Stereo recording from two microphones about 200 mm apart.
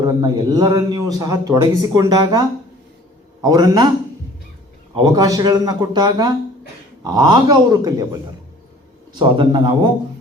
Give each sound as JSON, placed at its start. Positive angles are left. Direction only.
{"t": 0.0, "sound": "speech", "side_deg": -20}
{"t": 3.4, "sound": "speech", "side_deg": -20}
{"t": 5.0, "sound": "speech", "side_deg": -20}